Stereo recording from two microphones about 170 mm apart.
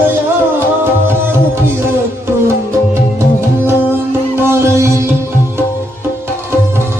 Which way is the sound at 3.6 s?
15° right (ahead or behind).